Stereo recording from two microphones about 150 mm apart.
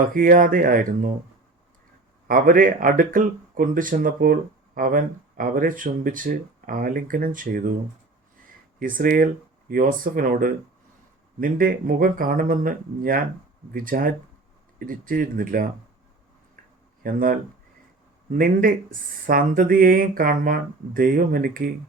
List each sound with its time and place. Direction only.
0.1 s speech: 70° right (ahead or behind)
2.2 s speech: 70° right (ahead or behind)
8.8 s speech: 70° right (ahead or behind)
17.0 s speech: 70° right (ahead or behind)